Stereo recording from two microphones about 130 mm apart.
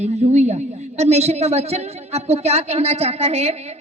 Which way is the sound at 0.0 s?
60° right (ahead or behind).